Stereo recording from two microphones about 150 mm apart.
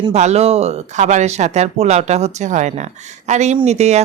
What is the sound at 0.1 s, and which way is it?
Speech, 45° right (ahead or behind).